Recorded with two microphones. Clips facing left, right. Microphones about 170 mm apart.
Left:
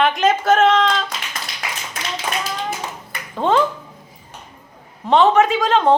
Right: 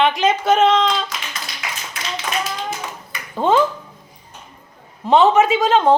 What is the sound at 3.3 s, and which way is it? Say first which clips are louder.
Speech: right 1 dB; 5° right (ahead or behind).